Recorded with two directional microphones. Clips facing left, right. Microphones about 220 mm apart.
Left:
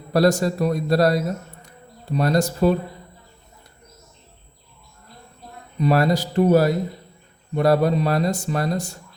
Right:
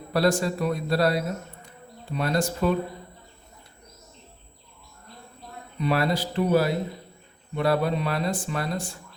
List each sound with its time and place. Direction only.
0.1 s speech: 40° left (ahead or behind)
1.6 s insect: 40° left (ahead or behind)
5.8 s speech: 40° left (ahead or behind)